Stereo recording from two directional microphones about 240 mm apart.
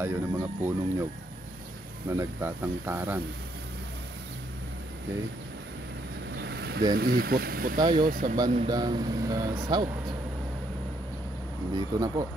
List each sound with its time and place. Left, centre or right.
0.0 s speech: centre
2.0 s speech: centre
6.4 s speech: right
8.6 s speech: centre
11.7 s speech: centre